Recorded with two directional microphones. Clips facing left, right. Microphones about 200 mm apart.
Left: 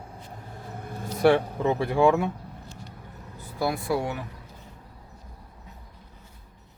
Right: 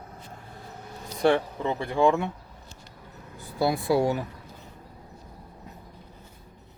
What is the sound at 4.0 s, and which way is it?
Speech, 35° right (ahead or behind).